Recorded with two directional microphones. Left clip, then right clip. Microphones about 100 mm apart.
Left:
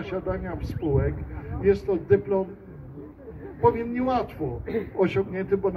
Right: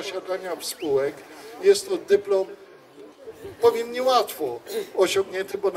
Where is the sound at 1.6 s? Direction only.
30° right (ahead or behind).